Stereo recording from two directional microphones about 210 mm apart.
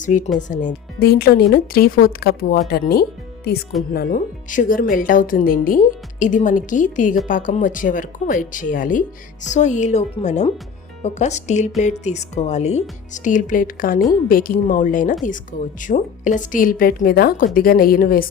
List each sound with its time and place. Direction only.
0.0 s a woman's voice: 35° left (ahead or behind)